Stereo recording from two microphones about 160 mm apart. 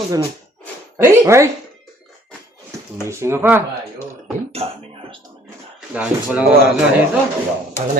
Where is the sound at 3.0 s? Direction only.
15° right (ahead or behind).